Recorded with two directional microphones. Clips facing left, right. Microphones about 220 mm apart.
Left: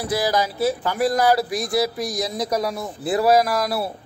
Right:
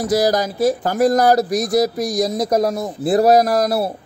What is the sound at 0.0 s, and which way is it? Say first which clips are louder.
Speech: right 5 dB; 45° right (ahead or behind).